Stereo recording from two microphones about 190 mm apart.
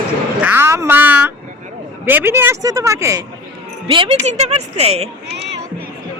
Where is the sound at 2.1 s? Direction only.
10° right (ahead or behind).